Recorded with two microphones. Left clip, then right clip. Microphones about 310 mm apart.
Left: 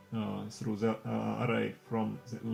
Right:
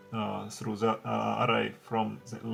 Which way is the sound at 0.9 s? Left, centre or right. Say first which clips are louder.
Right 7 dB; right.